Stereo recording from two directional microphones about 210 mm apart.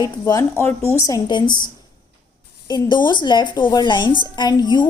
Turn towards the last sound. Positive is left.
turn(degrees=20)  # may be behind; listen again after turning